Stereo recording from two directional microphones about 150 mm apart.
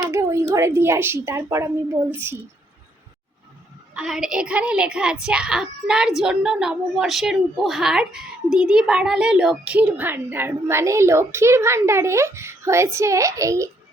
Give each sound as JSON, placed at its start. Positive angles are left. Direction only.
{"t": 0.1, "sound": "a woman's voice", "side_deg": -20}
{"t": 3.9, "sound": "a woman's voice", "side_deg": -5}